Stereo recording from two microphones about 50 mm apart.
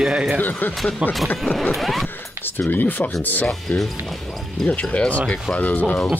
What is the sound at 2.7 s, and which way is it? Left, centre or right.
Speech, left.